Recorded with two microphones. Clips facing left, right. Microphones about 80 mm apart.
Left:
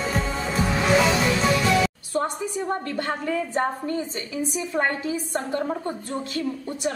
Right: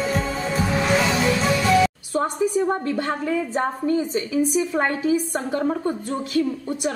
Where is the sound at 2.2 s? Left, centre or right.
Centre.